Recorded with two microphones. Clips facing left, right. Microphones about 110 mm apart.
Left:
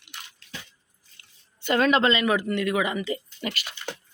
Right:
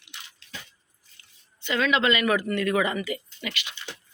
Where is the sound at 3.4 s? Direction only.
45° left (ahead or behind).